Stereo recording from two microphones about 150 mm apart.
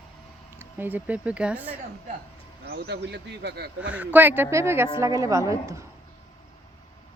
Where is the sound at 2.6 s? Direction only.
90° right.